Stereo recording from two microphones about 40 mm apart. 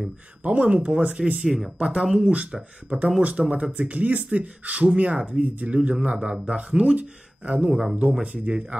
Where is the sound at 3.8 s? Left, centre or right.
Right.